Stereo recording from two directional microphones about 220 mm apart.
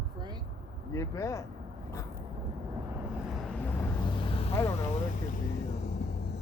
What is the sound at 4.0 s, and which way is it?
Vehicle, 20° left (ahead or behind).